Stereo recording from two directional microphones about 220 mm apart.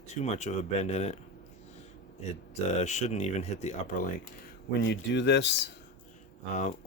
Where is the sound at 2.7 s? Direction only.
30° left (ahead or behind).